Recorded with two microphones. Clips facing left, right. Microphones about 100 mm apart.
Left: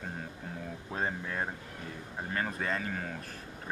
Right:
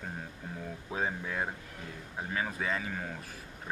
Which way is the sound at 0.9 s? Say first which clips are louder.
Right 1 dB; 5° right (ahead or behind).